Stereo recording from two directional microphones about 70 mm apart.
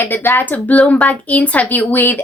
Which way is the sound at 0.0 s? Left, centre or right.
Left.